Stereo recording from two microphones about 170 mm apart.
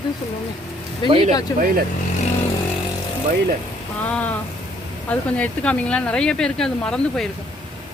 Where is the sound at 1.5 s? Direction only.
25° left (ahead or behind).